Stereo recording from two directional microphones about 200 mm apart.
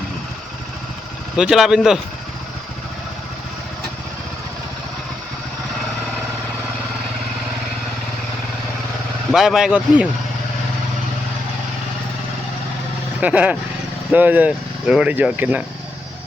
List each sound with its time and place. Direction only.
1.4 s speech: centre (ahead or behind)
9.3 s speech: centre (ahead or behind)
13.1 s speech: 5° right (ahead or behind)